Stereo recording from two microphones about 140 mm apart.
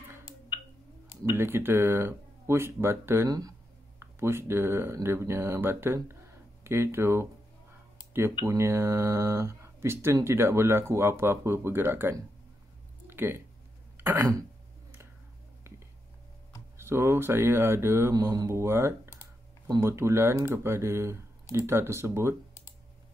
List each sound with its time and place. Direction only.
1.2 s speech: 15° right (ahead or behind)
8.5 s speech: 20° right (ahead or behind)
13.0 s a sound: 15° right (ahead or behind)
13.9 s speech: 15° right (ahead or behind)
16.7 s speech: 20° right (ahead or behind)